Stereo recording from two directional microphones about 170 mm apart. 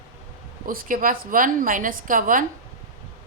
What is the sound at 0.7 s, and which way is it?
A woman's voice, 55° right (ahead or behind).